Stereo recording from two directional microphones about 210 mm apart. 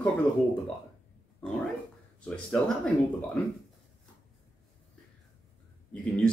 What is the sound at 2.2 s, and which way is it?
Speech, 5° left (ahead or behind).